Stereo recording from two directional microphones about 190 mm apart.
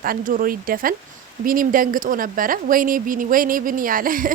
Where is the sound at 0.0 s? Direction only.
50° right (ahead or behind).